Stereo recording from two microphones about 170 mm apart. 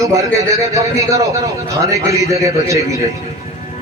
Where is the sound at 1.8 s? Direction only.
20° right (ahead or behind).